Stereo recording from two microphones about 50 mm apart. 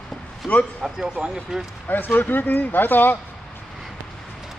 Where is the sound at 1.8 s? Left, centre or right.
Left.